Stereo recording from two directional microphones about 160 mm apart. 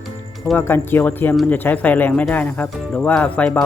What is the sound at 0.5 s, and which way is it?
Speech, 15° left (ahead or behind).